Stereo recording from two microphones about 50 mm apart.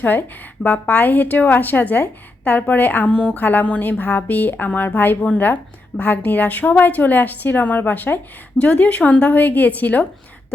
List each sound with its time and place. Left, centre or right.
0.0 s a woman's voice: left
3.1 s speech: centre
3.3 s a woman's voice: left
6.0 s a woman's voice: left
8.5 s a woman's voice: left